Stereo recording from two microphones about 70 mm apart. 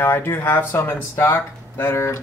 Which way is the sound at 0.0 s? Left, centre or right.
Left.